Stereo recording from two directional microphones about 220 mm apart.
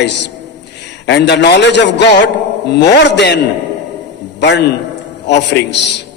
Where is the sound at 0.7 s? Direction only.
50° left (ahead or behind).